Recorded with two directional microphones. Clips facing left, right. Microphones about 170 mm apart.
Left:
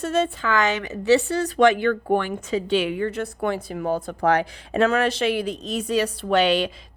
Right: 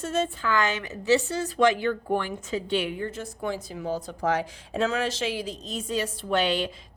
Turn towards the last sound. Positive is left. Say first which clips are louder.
# left 6 dB
turn(degrees=75)  # may be behind; listen again after turning